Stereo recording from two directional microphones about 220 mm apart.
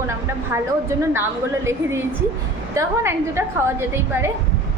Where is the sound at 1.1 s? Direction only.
10° right (ahead or behind).